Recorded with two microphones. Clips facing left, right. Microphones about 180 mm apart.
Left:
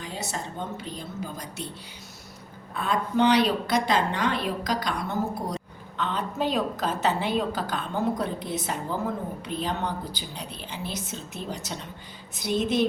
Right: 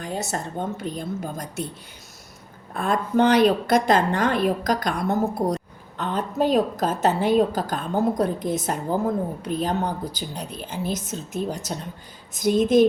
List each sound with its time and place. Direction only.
0.0 s a woman's voice: 50° right (ahead or behind)
2.7 s a woman's voice: 45° right (ahead or behind)